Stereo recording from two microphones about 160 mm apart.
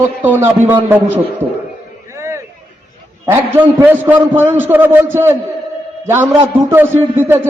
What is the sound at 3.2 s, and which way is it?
A man's voice, 15° right (ahead or behind).